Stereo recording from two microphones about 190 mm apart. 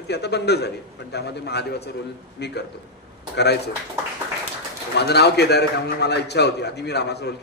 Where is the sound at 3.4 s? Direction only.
60° left (ahead or behind).